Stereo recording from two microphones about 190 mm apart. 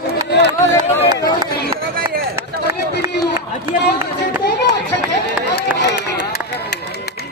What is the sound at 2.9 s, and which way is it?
Run, 60° left (ahead or behind).